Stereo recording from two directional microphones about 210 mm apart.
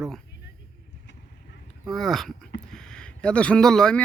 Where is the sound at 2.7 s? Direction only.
5° left (ahead or behind).